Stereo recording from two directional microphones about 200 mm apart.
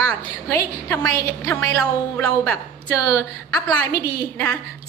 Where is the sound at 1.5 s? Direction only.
10° left (ahead or behind).